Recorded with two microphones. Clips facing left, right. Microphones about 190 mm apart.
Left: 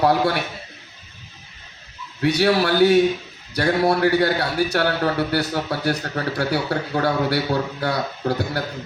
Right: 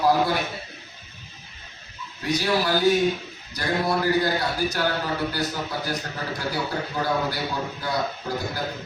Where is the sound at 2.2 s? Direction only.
65° left (ahead or behind).